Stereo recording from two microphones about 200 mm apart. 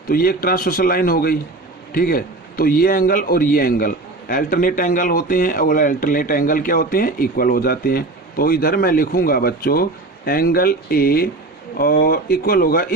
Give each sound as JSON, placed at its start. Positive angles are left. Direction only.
{"t": 0.1, "sound": "a man's voice", "side_deg": 45}